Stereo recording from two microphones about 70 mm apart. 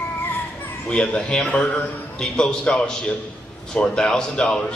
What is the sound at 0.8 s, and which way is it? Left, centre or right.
A man's voice, centre.